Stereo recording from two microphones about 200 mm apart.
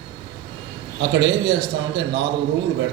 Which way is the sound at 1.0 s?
60° right (ahead or behind).